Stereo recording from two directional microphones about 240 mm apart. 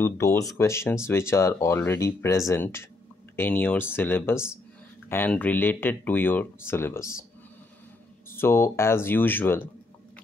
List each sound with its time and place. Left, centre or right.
0.0 s speech: centre
8.3 s speech: centre